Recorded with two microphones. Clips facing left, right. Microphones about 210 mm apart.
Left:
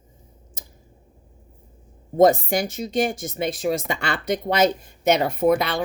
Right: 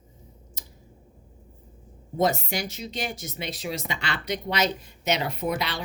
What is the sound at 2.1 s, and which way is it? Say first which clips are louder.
A woman's voice: left 8 dB; 50° left (ahead or behind).